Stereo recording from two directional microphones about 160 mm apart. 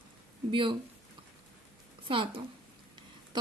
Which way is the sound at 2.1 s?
30° right (ahead or behind).